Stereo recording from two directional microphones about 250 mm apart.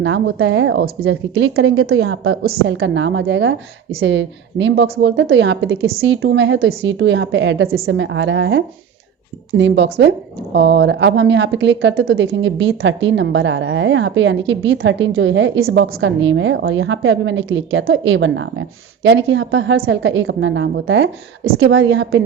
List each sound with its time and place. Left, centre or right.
0.0 s a woman's voice: right
2.4 s a woman's voice: right
2.7 s a woman's voice: right